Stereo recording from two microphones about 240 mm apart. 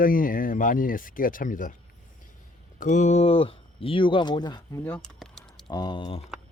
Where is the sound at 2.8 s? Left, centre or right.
Left; by 5.7 s centre.